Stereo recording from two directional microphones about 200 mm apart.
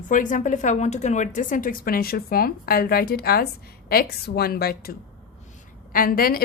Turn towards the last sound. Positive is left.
turn(degrees=45)  # may be behind; listen again after turning